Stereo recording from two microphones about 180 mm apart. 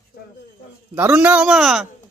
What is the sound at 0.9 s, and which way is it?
Speech, 10° right (ahead or behind).